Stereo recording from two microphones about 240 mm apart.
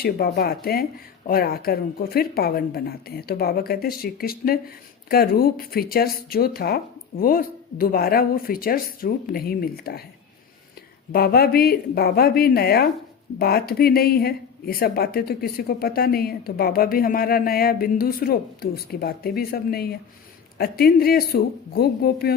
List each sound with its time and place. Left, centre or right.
0.0 s speech: left
11.1 s speech: left